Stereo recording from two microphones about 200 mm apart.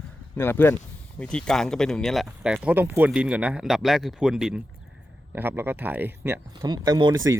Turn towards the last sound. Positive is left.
turn(degrees=-15)  # may be behind; listen again after turning